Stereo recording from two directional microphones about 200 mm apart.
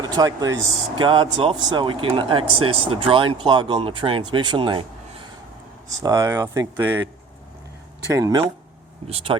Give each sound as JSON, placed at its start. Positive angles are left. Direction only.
{"t": 0.0, "sound": "speech", "side_deg": -20}
{"t": 8.1, "sound": "speech", "side_deg": -20}